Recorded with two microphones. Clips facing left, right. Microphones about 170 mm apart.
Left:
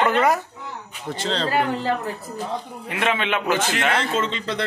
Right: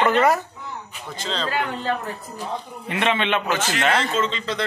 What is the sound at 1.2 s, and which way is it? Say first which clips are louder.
Speech: left 3 dB; 70° left (ahead or behind).